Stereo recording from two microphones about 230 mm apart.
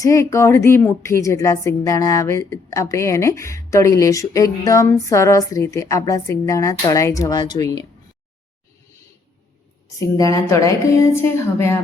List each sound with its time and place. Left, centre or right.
0.0 s a woman's voice: centre
10.0 s a woman's voice: centre